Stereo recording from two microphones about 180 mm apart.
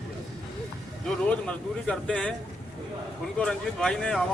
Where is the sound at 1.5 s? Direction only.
5° left (ahead or behind).